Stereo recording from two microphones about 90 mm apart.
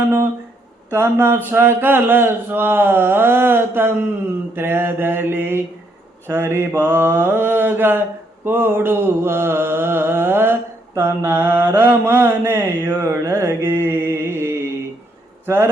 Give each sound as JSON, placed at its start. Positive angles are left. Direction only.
{"t": 0.9, "sound": "mantra", "side_deg": -25}